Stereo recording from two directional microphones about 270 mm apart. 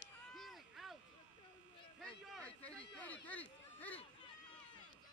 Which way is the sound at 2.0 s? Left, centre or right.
Centre.